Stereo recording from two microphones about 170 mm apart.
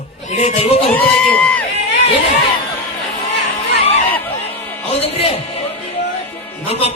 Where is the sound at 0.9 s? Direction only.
10° left (ahead or behind).